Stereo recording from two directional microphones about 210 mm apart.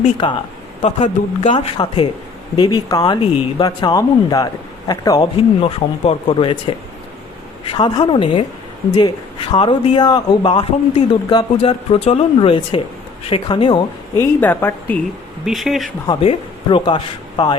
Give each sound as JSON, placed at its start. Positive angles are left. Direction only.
{"t": 0.0, "sound": "speech", "side_deg": 20}
{"t": 7.7, "sound": "speech", "side_deg": 20}
{"t": 14.2, "sound": "a woman's voice", "side_deg": 10}
{"t": 16.0, "sound": "speech", "side_deg": 25}